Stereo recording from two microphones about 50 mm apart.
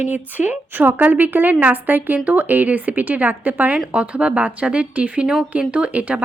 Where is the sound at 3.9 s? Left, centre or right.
Right.